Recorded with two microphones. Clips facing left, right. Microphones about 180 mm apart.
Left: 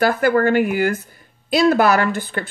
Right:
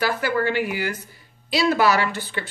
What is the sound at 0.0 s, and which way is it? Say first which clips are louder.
A woman's voice: left 7 dB; 50° left (ahead or behind).